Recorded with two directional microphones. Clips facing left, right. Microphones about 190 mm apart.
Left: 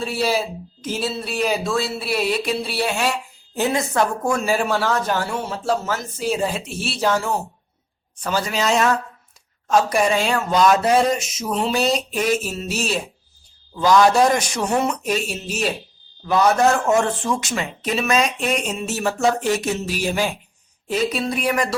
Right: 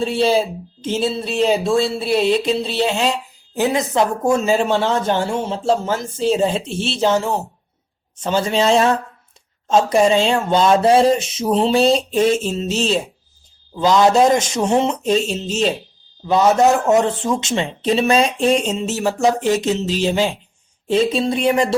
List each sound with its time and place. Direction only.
0.0 s speech: 25° right (ahead or behind)